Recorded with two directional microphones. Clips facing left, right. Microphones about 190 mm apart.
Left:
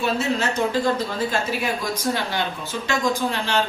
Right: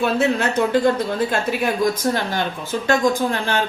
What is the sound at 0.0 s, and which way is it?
Speech, 55° right (ahead or behind).